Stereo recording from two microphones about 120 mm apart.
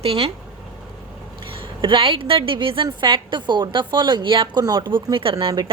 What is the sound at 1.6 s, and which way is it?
A woman's voice, 40° right (ahead or behind).